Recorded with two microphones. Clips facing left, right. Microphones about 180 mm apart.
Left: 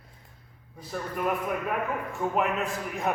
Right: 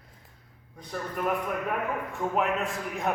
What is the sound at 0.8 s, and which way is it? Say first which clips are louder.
A man's voice: left 1 dB; 5° left (ahead or behind).